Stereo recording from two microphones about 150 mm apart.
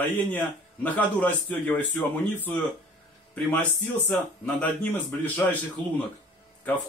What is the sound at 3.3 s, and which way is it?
A man's voice, 10° left (ahead or behind).